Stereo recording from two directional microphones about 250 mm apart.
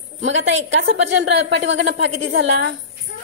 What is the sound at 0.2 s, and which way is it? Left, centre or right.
A woman's voice, right.